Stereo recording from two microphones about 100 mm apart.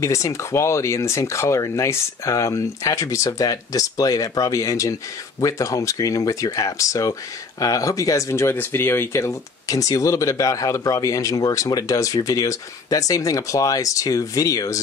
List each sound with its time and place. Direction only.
0.0 s speech: 30° left (ahead or behind)